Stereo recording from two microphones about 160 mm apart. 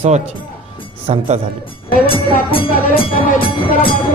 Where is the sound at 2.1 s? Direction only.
35° left (ahead or behind).